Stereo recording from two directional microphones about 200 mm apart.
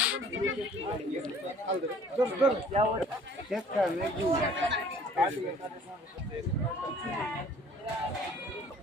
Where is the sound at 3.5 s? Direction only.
5° right (ahead or behind).